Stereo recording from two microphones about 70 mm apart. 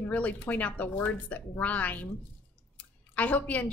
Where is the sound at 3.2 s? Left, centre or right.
Left.